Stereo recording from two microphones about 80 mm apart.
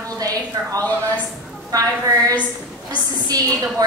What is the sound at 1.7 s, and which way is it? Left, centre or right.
A woman's voice, right.